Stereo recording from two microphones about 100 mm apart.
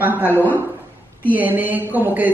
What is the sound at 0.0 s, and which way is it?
Speech, 20° right (ahead or behind).